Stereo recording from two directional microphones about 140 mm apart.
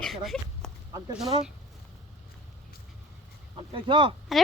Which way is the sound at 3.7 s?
35° right (ahead or behind).